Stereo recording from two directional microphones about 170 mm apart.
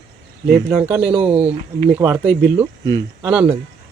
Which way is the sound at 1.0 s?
35° right (ahead or behind).